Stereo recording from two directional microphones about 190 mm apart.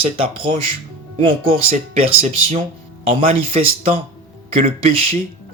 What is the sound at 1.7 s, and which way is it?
Speech, 40° right (ahead or behind).